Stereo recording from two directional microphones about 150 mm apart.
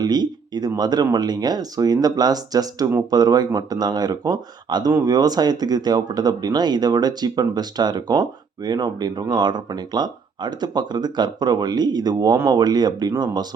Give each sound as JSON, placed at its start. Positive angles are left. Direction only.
{"t": 0.0, "sound": "speech", "side_deg": -30}